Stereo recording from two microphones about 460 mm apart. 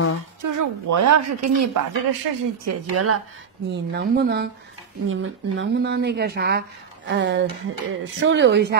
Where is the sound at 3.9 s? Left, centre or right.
Right.